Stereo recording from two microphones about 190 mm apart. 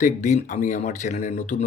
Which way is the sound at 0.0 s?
40° left (ahead or behind).